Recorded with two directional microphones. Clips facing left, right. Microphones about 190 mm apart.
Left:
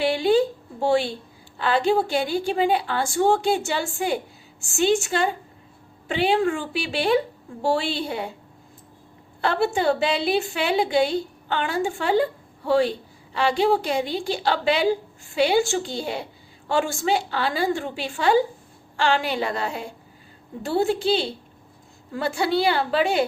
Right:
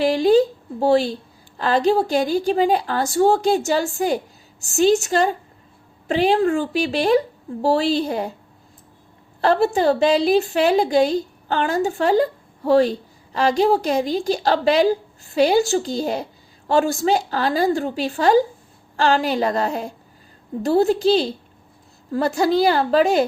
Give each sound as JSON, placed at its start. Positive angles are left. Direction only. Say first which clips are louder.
{"t": 0.0, "sound": "a woman's voice", "louder": "right 4 dB", "side_deg": -40}
{"t": 9.4, "sound": "a woman's voice", "louder": "right 5 dB", "side_deg": -40}